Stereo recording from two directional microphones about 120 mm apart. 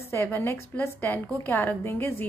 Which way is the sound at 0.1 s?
20° left (ahead or behind).